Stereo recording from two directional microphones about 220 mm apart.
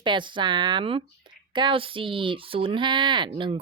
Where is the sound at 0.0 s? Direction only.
20° right (ahead or behind).